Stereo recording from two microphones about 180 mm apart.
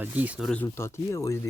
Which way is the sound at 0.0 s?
10° right (ahead or behind).